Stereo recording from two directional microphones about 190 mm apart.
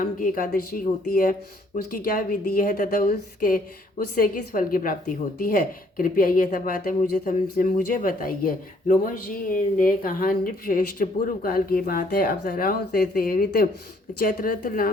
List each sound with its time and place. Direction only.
0.0 s speech: 45° left (ahead or behind)